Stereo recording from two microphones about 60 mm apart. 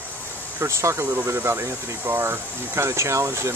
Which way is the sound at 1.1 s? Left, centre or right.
Right.